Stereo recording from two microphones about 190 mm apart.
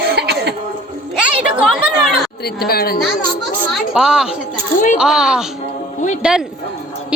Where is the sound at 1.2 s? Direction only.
5° right (ahead or behind).